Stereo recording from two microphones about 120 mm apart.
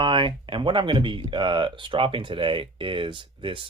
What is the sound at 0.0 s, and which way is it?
Speech, 45° right (ahead or behind).